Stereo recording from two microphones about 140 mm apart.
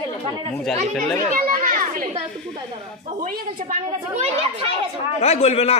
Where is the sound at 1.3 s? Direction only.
80° right.